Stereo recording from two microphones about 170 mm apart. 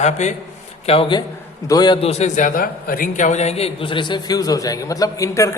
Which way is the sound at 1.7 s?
25° left (ahead or behind).